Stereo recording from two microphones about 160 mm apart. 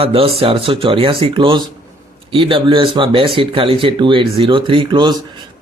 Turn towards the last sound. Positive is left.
turn(degrees=-30)  # may be behind; listen again after turning